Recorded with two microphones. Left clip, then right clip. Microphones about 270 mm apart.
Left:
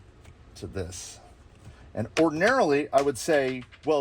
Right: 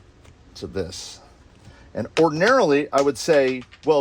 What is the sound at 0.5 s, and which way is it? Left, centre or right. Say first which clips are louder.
Speech: right 7 dB; right.